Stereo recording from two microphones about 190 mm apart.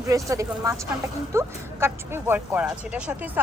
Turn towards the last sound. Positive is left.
turn(degrees=-5)  # may be behind; listen again after turning